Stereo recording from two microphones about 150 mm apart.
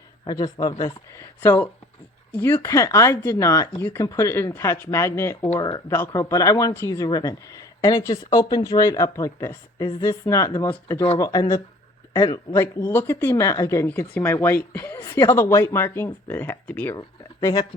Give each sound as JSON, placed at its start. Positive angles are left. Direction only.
{"t": 0.3, "sound": "speech", "side_deg": 25}
{"t": 12.5, "sound": "speech", "side_deg": 15}
{"t": 17.4, "sound": "speech", "side_deg": 25}